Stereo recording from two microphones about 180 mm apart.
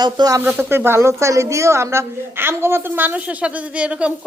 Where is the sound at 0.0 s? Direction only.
20° right (ahead or behind).